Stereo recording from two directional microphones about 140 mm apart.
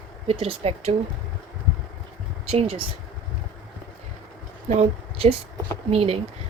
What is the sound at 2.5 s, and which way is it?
Speech, 45° right (ahead or behind).